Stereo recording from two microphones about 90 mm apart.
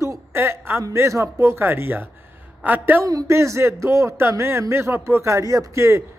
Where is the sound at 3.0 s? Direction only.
35° right (ahead or behind).